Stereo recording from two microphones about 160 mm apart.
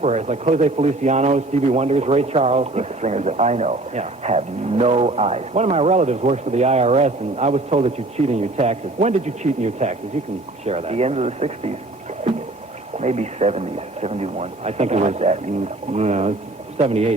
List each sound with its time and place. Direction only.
0.0 s a man's voice: 45° right (ahead or behind)
13.0 s a man's voice: 45° right (ahead or behind)